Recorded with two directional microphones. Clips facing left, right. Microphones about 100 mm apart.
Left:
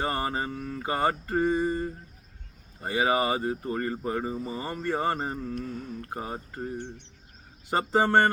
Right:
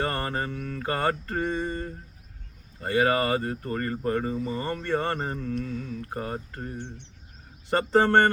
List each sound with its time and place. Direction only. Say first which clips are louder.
0.0 s speech: even; 15° left (ahead or behind)
5.5 s mantra: right 3 dB; 40° left (ahead or behind)
6.1 s speech: right 1 dB; 10° left (ahead or behind)